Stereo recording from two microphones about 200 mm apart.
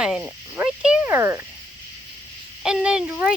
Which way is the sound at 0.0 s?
5° right (ahead or behind).